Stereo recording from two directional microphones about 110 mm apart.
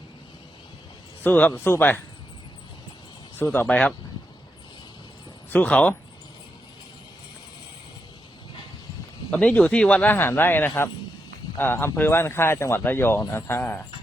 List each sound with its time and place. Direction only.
1.2 s speech: 15° left (ahead or behind)
3.3 s speech: 20° left (ahead or behind)
5.5 s speech: 10° left (ahead or behind)
9.3 s speech: 10° left (ahead or behind)